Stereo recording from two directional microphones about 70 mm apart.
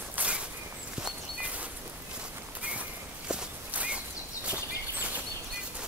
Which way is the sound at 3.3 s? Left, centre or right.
Centre.